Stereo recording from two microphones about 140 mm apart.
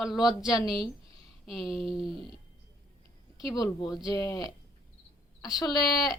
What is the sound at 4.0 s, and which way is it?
Speech, 25° left (ahead or behind).